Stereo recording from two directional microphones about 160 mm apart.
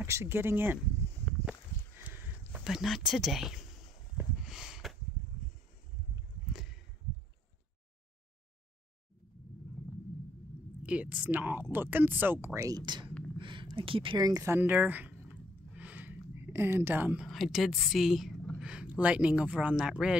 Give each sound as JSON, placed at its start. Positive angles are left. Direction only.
{"t": 0.0, "sound": "a woman's voice", "side_deg": -15}
{"t": 2.0, "sound": "a sound", "side_deg": -10}
{"t": 10.8, "sound": "a woman's voice", "side_deg": -10}